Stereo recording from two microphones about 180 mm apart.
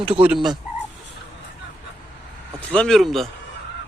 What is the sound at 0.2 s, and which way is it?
Speech, 5° right (ahead or behind).